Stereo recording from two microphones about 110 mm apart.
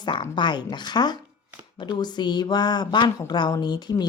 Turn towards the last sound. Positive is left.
turn(degrees=40)  # may be behind; listen again after turning